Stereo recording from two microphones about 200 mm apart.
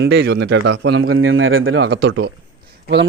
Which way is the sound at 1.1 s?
85° right.